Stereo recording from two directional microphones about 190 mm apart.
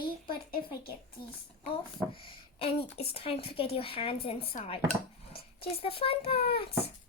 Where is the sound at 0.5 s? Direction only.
55° left (ahead or behind).